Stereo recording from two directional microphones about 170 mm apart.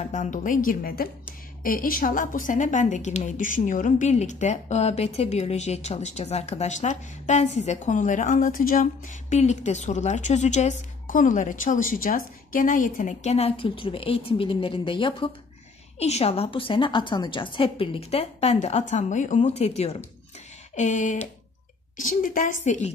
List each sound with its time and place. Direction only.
0.0 s a woman's voice: 45° left (ahead or behind)